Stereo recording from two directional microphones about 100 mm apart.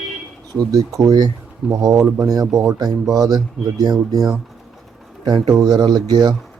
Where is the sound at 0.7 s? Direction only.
35° right (ahead or behind).